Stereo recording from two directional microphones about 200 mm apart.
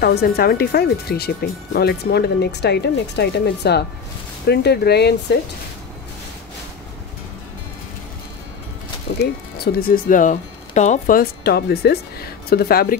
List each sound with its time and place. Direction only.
0.0 s speech: 50° left (ahead or behind)
9.2 s speech: 50° left (ahead or behind)